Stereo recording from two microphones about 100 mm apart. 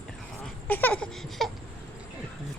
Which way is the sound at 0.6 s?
15° left (ahead or behind).